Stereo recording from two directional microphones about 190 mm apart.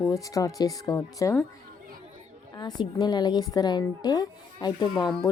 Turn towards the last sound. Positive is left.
turn(degrees=20)  # may be behind; listen again after turning